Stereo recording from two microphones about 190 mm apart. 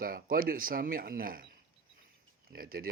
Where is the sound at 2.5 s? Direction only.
50° right (ahead or behind).